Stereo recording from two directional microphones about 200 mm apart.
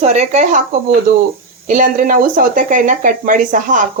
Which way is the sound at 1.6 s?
40° right (ahead or behind).